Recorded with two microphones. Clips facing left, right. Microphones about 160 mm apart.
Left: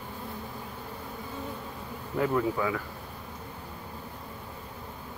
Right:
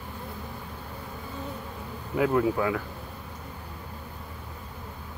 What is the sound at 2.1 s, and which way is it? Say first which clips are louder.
Speech: right 3 dB; 5° right (ahead or behind).